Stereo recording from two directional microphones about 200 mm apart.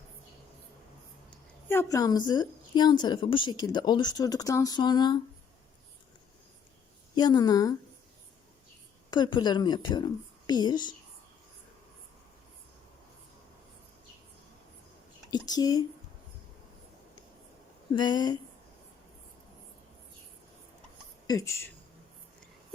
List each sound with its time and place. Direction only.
1.6 s a woman's voice: 10° left (ahead or behind)
7.2 s a woman's voice: 20° left (ahead or behind)
9.0 s a woman's voice: 20° left (ahead or behind)
15.3 s speech: 20° left (ahead or behind)
17.9 s a woman's voice: 20° left (ahead or behind)
21.2 s speech: 15° left (ahead or behind)